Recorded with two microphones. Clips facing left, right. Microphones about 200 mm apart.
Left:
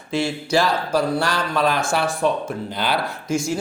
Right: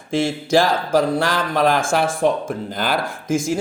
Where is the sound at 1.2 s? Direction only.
50° right (ahead or behind).